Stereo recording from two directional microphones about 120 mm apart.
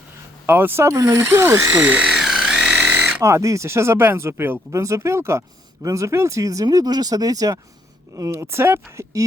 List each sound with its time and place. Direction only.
0.4 s speech: 20° right (ahead or behind)
1.8 s electric toothbrush: 10° right (ahead or behind)
3.2 s speech: 25° right (ahead or behind)